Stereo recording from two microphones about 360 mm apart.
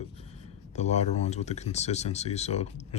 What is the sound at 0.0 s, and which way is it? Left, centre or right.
Speech, centre.